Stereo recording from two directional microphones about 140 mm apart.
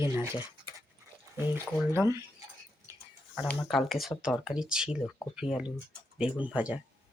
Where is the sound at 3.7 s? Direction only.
Centre (ahead or behind).